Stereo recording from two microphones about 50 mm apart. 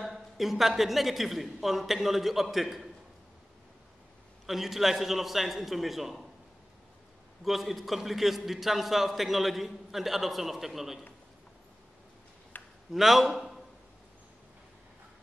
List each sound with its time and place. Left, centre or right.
0.0 s a man's voice: centre
4.5 s a man's voice: centre
7.4 s a man's voice: centre
12.5 s a sound: left
12.9 s a man's voice: centre